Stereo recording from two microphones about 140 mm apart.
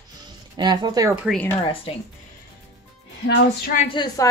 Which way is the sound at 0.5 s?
30° right (ahead or behind).